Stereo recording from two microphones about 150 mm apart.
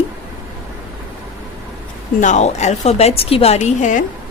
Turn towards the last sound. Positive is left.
turn(degrees=55)  # may be behind; listen again after turning